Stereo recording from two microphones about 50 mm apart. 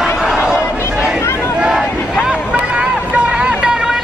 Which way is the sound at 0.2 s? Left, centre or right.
Centre.